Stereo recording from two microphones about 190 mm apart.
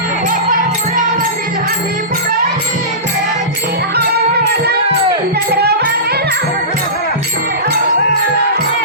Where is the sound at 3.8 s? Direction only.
55° right (ahead or behind).